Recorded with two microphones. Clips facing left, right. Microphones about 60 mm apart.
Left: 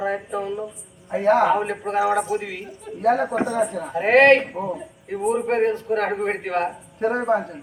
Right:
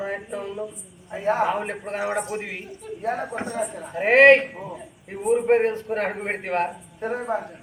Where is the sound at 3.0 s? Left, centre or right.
Left.